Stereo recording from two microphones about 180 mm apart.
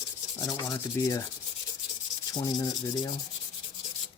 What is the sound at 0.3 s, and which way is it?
Rub, 20° left (ahead or behind).